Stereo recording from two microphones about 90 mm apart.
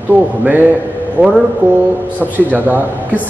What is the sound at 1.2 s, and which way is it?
Speech, 25° right (ahead or behind).